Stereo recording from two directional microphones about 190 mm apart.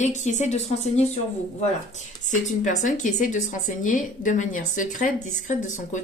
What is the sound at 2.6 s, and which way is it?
A woman's voice, 40° left (ahead or behind).